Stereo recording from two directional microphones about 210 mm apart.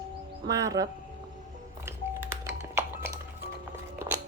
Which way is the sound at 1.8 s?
10° right (ahead or behind).